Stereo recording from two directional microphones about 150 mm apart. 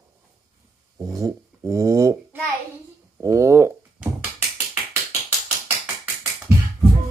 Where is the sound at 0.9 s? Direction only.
20° right (ahead or behind).